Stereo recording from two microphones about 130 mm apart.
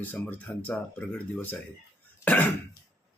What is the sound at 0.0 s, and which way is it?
Speech, 15° left (ahead or behind).